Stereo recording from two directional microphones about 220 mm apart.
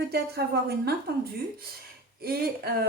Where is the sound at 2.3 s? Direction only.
45° right (ahead or behind).